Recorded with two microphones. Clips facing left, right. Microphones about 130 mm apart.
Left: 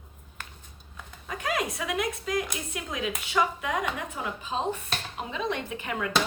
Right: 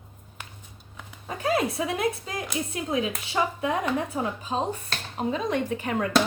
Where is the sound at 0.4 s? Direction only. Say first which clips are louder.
Even; 15° right (ahead or behind).